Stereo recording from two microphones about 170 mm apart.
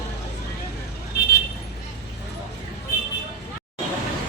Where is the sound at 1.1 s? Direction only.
70° left (ahead or behind).